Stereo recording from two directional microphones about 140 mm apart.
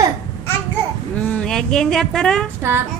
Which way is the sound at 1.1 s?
10° left (ahead or behind).